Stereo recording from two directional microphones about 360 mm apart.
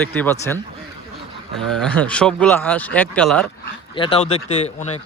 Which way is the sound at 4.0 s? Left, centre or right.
Centre.